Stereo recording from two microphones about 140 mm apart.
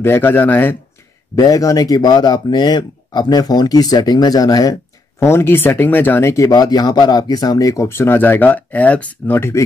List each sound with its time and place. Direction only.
0.0 s speech: 15° left (ahead or behind)
1.3 s speech: 25° left (ahead or behind)